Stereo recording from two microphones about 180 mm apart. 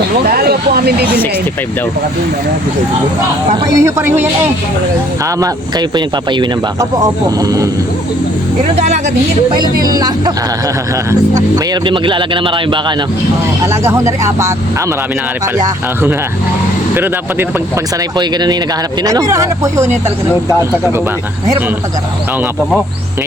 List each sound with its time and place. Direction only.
0.3 s speech: 60° right (ahead or behind)
3.7 s speech: 15° right (ahead or behind)
6.3 s speech: 20° right (ahead or behind)
9.9 s speech: 20° right (ahead or behind)
13.8 s speech: 15° right (ahead or behind)
15.5 s speech: 20° right (ahead or behind)
18.2 s speech: 25° right (ahead or behind)